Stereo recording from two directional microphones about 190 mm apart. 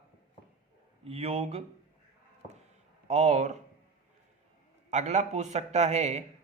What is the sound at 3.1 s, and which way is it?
Speech, 35° right (ahead or behind).